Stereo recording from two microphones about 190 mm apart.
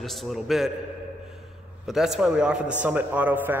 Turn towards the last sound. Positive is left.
turn(degrees=-10)  # may be behind; listen again after turning